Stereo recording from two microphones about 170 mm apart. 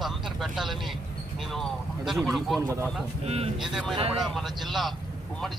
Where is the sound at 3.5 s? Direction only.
Centre (ahead or behind).